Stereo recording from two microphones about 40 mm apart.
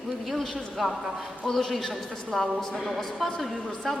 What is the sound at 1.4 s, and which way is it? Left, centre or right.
A woman's voice, centre.